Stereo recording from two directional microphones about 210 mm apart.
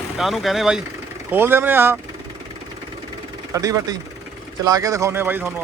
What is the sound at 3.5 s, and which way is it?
Speech, 15° right (ahead or behind).